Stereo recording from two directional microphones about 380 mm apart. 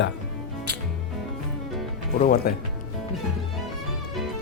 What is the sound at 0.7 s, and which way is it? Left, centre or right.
Music, right.